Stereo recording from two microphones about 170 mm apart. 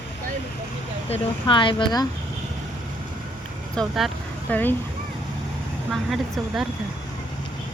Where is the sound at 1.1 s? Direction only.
30° left (ahead or behind).